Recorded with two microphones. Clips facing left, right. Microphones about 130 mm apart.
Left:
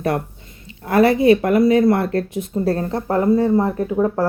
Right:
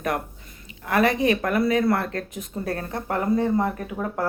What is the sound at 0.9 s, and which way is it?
Speech, 30° left (ahead or behind).